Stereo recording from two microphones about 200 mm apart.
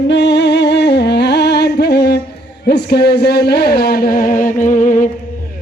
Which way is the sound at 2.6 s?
55° left (ahead or behind).